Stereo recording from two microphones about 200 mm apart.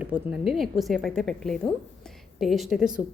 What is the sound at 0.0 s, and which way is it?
A woman's voice, 5° right (ahead or behind).